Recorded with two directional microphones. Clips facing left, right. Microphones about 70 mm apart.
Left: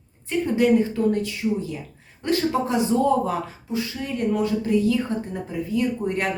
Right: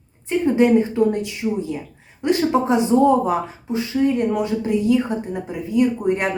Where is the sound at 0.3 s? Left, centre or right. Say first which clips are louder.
Right 4 dB; right.